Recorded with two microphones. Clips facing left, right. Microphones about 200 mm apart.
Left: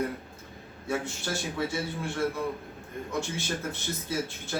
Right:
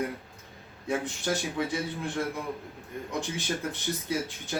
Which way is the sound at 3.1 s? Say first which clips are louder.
Even; 15° right (ahead or behind).